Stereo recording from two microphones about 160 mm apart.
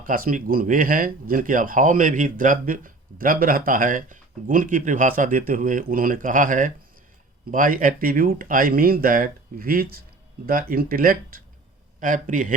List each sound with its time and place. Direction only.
0.0 s speech: 60° right (ahead or behind)